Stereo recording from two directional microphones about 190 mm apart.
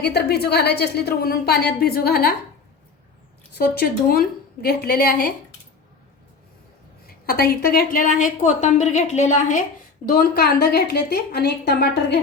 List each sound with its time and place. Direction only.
0.0 s a woman's voice: 55° left (ahead or behind)
3.6 s a woman's voice: 55° left (ahead or behind)
7.1 s a woman's voice: 50° left (ahead or behind)